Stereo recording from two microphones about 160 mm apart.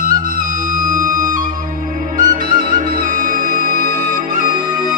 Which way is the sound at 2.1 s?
55° right (ahead or behind).